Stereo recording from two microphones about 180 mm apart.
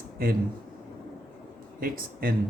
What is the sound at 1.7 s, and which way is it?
Speech, 55° right (ahead or behind).